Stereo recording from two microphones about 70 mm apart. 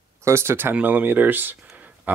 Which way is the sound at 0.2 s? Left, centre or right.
Right.